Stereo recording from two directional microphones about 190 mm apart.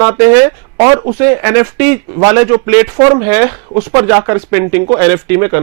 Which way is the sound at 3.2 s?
15° right (ahead or behind).